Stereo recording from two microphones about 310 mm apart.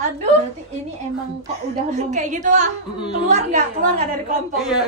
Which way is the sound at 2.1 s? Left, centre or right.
Right.